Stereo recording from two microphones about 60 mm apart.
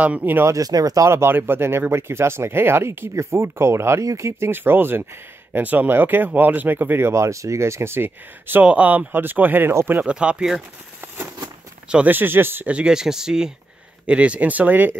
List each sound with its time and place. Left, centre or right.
0.0 s speech: right
0.5 s speech: right
1.1 s speech: right
4.0 s speech: right
4.5 s speech: right
8.6 s speech: right
10.0 s speech: centre
12.1 s speech: right
12.6 s speech: right
12.9 s speech: centre
14.0 s speech: right